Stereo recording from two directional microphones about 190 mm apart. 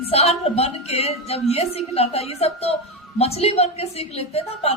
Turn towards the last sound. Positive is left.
turn(degrees=35)  # may be behind; listen again after turning